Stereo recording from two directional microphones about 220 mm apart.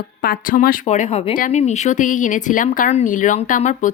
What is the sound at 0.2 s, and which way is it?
Speech, 40° left (ahead or behind).